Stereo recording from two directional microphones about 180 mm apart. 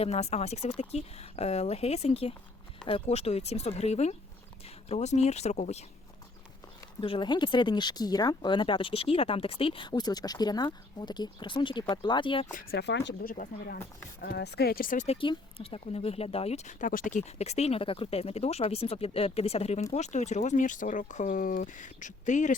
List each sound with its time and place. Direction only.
0.0 s speech: 35° left (ahead or behind)
7.0 s speech: 30° left (ahead or behind)
12.7 s speech: 70° left (ahead or behind)
13.2 s speech: 50° left (ahead or behind)
14.2 s speech: 65° left (ahead or behind); by 22.5 s 40° left (ahead or behind)